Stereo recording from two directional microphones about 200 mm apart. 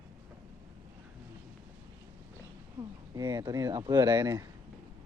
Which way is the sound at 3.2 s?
20° right (ahead or behind).